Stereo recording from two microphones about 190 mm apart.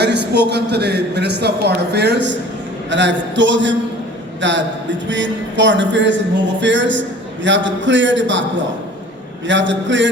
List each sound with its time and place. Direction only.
0.0 s a man's voice: 60° right (ahead or behind)
9.5 s a man's voice: 75° right (ahead or behind)